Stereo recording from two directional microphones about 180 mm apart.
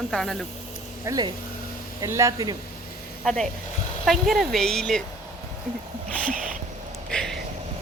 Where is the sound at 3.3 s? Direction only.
Centre (ahead or behind).